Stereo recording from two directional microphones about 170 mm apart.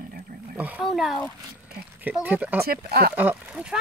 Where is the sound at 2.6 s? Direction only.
65° right (ahead or behind).